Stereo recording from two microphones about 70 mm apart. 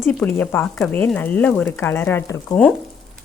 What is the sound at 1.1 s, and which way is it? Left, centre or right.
Speech, left.